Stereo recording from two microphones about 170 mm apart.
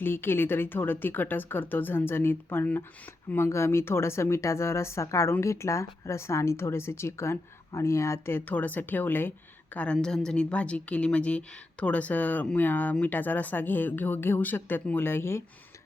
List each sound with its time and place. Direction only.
0.0 s speech: 15° left (ahead or behind)